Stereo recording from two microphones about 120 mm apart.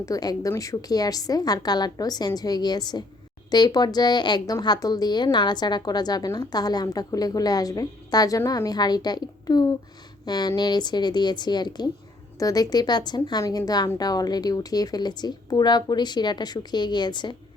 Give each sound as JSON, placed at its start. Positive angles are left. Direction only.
{"t": 0.0, "sound": "a woman's voice", "side_deg": 30}